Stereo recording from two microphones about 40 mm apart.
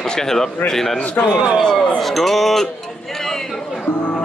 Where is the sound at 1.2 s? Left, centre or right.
Left.